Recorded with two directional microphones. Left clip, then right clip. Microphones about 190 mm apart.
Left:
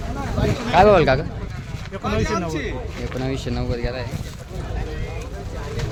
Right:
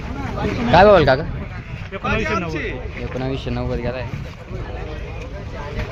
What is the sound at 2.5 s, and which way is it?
Speech, 60° left (ahead or behind).